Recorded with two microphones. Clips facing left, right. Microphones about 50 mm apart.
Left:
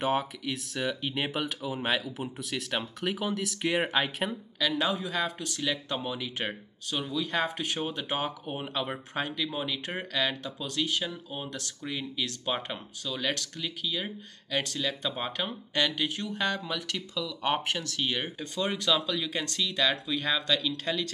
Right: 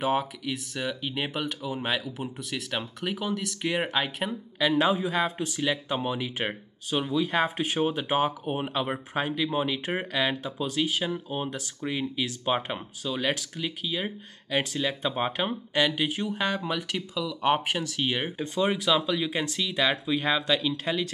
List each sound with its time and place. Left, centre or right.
0.0 s speech: centre
4.6 s speech: right